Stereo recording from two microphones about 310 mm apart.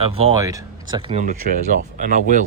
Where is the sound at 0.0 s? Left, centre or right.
Centre.